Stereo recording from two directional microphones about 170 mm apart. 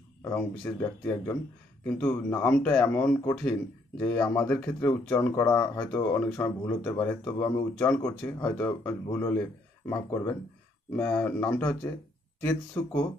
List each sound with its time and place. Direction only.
0.2 s speech: 10° left (ahead or behind)